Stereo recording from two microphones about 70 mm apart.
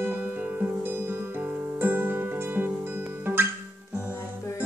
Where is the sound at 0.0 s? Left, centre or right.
Right.